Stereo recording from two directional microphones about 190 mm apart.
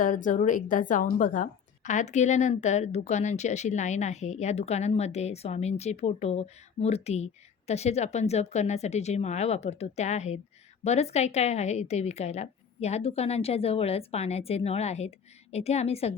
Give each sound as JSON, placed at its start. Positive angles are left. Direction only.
{"t": 0.0, "sound": "a woman's voice", "side_deg": 45}